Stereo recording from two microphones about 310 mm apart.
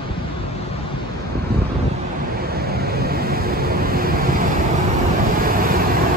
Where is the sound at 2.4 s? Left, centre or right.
Right.